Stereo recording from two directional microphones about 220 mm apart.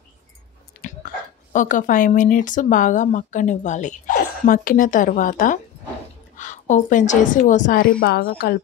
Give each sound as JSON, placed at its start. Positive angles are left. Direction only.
{"t": 0.8, "sound": "a woman's voice", "side_deg": 35}